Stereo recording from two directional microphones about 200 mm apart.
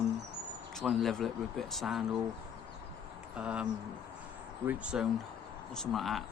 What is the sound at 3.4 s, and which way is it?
Speech, 5° right (ahead or behind).